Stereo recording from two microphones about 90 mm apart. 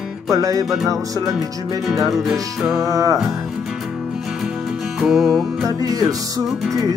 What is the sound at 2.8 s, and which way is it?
Music, 40° right (ahead or behind).